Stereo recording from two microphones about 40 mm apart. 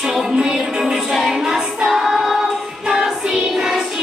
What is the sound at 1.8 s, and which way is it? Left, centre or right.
Choir, centre.